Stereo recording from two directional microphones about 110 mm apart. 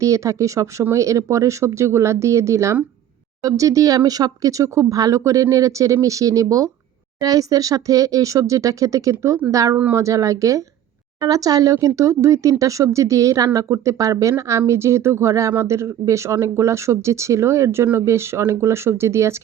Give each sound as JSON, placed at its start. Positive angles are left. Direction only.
{"t": 0.0, "sound": "speech", "side_deg": -30}